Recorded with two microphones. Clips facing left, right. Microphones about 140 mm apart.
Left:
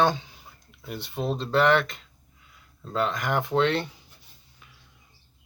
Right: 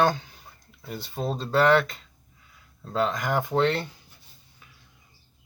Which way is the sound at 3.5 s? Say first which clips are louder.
Left 1 dB; 5° right (ahead or behind).